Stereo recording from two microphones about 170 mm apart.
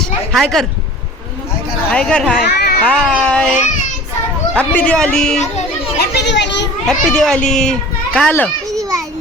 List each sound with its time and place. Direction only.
0.3 s speech: centre (ahead or behind)
1.9 s speech: 5° left (ahead or behind)
2.5 s a child's voice: 75° left (ahead or behind)
2.8 s speech: 5° left (ahead or behind)
4.5 s speech: 10° left (ahead or behind)
6.0 s a child's voice: 90° left
6.8 s a child's voice: 5° left (ahead or behind)